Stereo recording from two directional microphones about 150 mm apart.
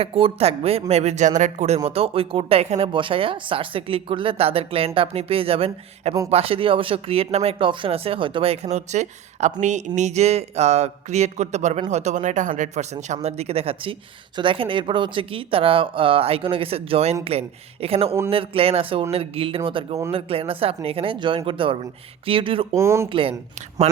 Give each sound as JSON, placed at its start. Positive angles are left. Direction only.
{"t": 0.0, "sound": "speech", "side_deg": -40}
{"t": 1.9, "sound": "speech", "side_deg": -40}
{"t": 22.7, "sound": "speech", "side_deg": -20}
{"t": 23.8, "sound": "speech", "side_deg": -45}